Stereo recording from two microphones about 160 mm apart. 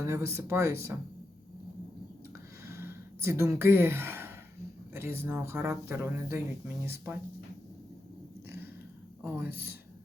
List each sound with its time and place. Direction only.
0.0 s speech: 15° right (ahead or behind)
2.6 s gasp: 15° right (ahead or behind)
4.9 s speech: 15° right (ahead or behind)
9.2 s speech: 10° right (ahead or behind)